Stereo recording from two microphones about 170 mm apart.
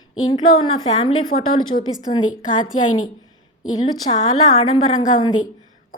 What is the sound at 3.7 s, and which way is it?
Speech, 30° left (ahead or behind).